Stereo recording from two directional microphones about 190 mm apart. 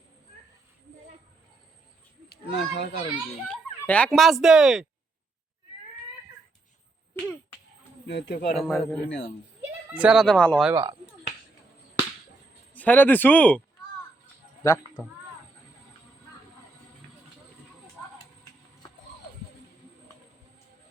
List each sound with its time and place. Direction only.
2.5 s a child's voice: 65° left (ahead or behind)
3.5 s speech: 5° left (ahead or behind)
8.0 s speech: 65° left (ahead or behind)
8.5 s speech: centre (ahead or behind)
12.7 s speech: 10° left (ahead or behind)
14.6 s a sound: 15° left (ahead or behind)